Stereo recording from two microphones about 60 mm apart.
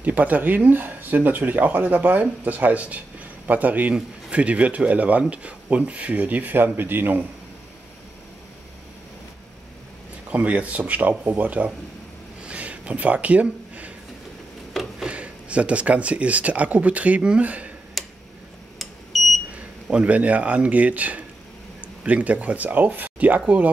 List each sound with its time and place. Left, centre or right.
0.0 s speech: right
10.3 s speech: right
12.4 s a sound: right
14.7 s a sound: centre
15.0 s speech: right
18.0 s tick-tock: centre
18.8 s smoke detector: centre
19.5 s speech: right